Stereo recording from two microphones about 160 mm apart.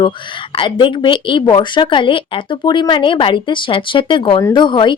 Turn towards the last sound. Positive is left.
turn(degrees=30)  # may be behind; listen again after turning